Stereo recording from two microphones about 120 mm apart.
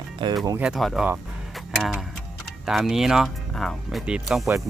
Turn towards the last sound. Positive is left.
turn(degrees=-5)  # may be behind; listen again after turning